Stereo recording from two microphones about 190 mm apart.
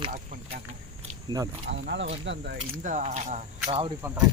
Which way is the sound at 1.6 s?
70° right (ahead or behind).